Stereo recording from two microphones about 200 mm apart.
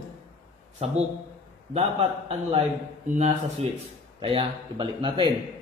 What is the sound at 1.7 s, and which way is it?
A man's voice, 30° right (ahead or behind).